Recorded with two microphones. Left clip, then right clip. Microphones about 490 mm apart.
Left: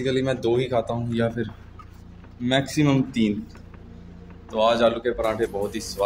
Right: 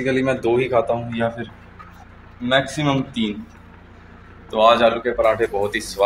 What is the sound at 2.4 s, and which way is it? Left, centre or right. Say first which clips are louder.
Speech: right 3 dB; left.